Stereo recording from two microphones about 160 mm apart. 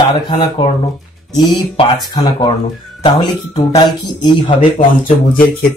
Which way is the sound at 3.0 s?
40° left (ahead or behind).